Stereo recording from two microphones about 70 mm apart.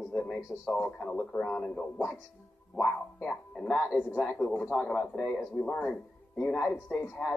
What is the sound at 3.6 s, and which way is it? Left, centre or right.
Speech, centre.